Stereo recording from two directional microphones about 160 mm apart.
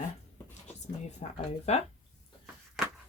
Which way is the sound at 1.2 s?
50° left (ahead or behind).